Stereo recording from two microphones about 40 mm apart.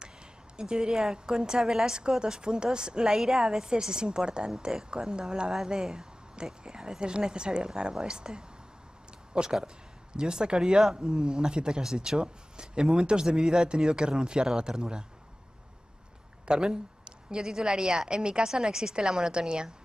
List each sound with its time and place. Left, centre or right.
0.6 s a woman's voice: centre
16.4 s a woman's voice: centre